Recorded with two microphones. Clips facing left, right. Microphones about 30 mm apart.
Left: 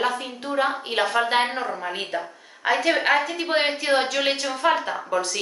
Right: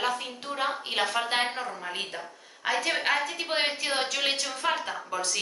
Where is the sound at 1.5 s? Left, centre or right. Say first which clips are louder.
Left 6 dB; left.